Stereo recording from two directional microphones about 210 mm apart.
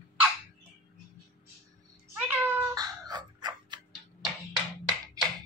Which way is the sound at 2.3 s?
20° right (ahead or behind).